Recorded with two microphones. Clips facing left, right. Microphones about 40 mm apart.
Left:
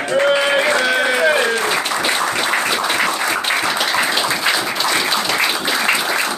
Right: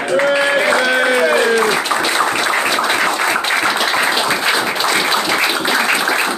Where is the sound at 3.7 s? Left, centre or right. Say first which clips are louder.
Right 2 dB; right.